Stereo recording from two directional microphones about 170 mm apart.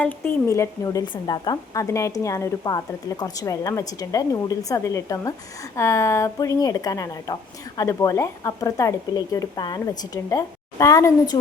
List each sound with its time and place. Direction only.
0.0 s speech: 10° left (ahead or behind)